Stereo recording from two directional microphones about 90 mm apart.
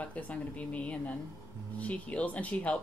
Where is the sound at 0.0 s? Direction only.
15° left (ahead or behind).